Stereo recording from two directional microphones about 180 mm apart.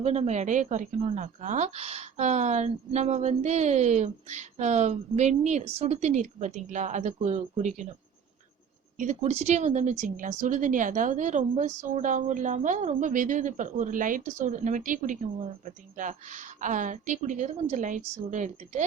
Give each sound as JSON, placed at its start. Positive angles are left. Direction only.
{"t": 0.0, "sound": "a woman's voice", "side_deg": -35}
{"t": 9.0, "sound": "speech", "side_deg": -40}